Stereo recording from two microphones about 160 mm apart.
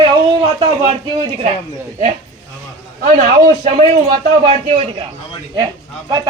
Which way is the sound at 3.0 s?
55° right (ahead or behind).